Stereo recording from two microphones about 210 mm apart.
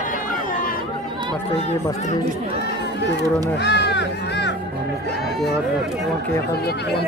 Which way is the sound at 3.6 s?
55° left (ahead or behind).